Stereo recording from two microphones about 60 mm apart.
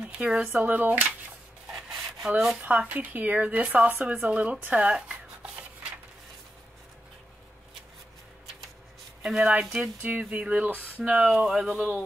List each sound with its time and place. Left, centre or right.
0.0 s a sound: centre
0.4 s speech: right
2.2 s speech: centre
2.6 s speech: right
9.2 s speech: centre